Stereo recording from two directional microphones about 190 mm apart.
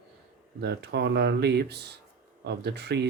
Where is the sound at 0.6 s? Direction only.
60° right (ahead or behind).